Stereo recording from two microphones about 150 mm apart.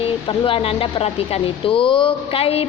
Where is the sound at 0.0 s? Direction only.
35° left (ahead or behind).